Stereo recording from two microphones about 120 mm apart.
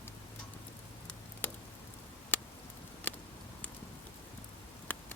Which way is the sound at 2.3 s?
15° left (ahead or behind).